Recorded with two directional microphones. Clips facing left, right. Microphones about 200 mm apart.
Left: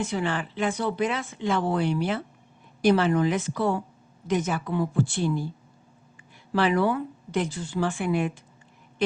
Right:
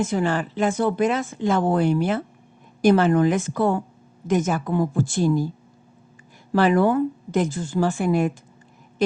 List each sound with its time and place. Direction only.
0.0 s speech: 45° right (ahead or behind)
6.5 s speech: 45° right (ahead or behind)